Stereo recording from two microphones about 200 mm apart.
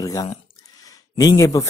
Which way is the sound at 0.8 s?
20° left (ahead or behind).